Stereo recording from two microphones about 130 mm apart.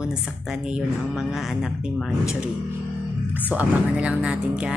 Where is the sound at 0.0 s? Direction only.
5° right (ahead or behind).